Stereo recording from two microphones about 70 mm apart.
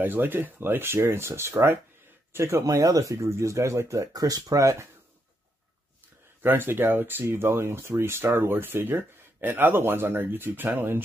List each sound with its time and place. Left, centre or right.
0.0 s speech: right
2.6 s speech: right
6.4 s speech: right